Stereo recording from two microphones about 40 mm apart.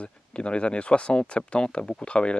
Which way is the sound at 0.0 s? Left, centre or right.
Left.